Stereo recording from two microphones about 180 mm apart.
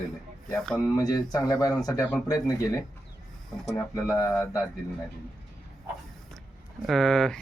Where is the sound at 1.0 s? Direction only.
20° left (ahead or behind).